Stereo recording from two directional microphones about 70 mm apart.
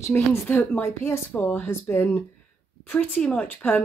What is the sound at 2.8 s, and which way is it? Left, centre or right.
Speech, left.